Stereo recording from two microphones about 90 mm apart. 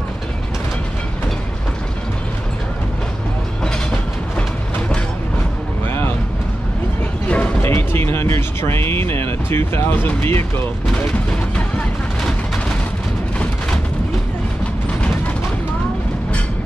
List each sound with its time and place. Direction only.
4.4 s train: 15° left (ahead or behind)
5.9 s vehicle: 25° left (ahead or behind)
7.2 s a sound: 15° left (ahead or behind)
7.6 s music: 25° left (ahead or behind)
9.5 s speech: 25° left (ahead or behind)